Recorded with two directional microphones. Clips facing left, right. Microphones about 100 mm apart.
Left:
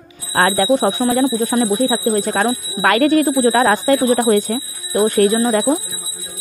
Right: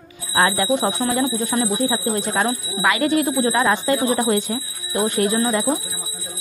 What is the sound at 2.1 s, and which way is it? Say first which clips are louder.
Speech: left 4 dB; 40° left (ahead or behind).